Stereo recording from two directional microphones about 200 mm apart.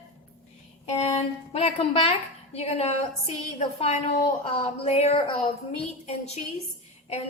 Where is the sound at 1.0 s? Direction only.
30° left (ahead or behind).